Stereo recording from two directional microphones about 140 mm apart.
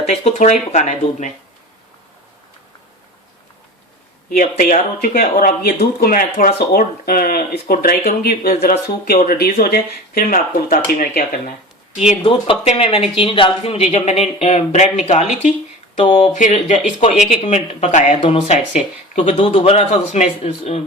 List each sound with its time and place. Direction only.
0.0 s speech: 50° left (ahead or behind)
4.3 s speech: 90° left; by 11.5 s 75° left (ahead or behind)
12.2 s speech: 40° left (ahead or behind)
18.8 s speech: 45° left (ahead or behind)